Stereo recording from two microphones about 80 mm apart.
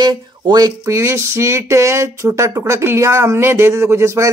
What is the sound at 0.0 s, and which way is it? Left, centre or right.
Speech, right.